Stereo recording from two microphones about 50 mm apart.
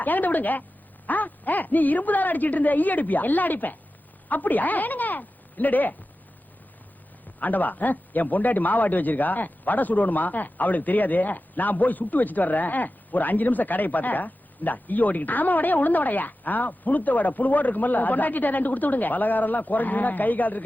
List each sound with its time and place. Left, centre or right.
0.0 s a man's voice: left
7.3 s a man's voice: left